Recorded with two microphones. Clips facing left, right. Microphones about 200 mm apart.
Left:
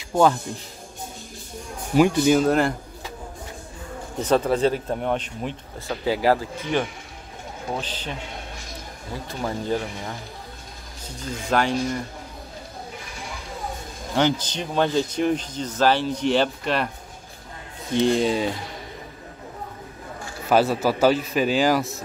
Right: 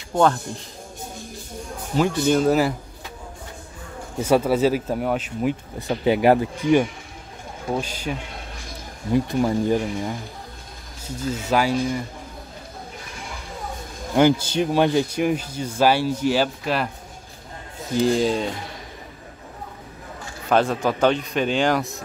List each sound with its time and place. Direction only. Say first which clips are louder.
2.0 s a man's voice: left 2 dB; 10° left (ahead or behind)
4.2 s speech: right 2 dB; 10° right (ahead or behind)
5.8 s speech: right 3 dB; 20° right (ahead or behind)
9.1 s speech: right 9 dB; 15° right (ahead or behind)
11.1 s speech: right 2 dB; 5° right (ahead or behind)
14.1 s a man's voice: right 5 dB; 10° right (ahead or behind)
20.4 s a man's voice: left 1 dB; 5° left (ahead or behind)